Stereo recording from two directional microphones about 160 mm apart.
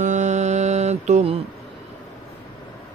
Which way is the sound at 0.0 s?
50° right (ahead or behind).